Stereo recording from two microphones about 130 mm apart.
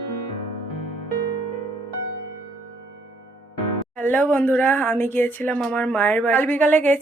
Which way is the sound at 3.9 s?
10° left (ahead or behind).